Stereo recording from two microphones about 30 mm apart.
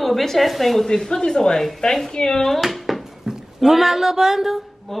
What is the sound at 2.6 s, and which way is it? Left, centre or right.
Dishes, centre.